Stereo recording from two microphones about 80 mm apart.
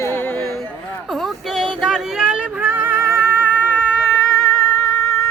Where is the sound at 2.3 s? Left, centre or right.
Centre.